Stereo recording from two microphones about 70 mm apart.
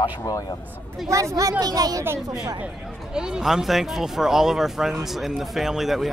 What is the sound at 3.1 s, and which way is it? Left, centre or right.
Speech, centre.